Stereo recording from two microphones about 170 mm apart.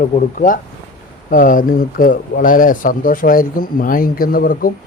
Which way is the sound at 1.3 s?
55° left (ahead or behind).